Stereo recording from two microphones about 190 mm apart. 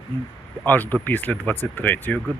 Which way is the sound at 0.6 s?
10° left (ahead or behind).